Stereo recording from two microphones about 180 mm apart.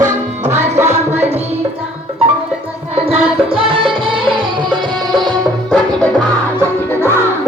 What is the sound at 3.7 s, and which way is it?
Music, 30° right (ahead or behind).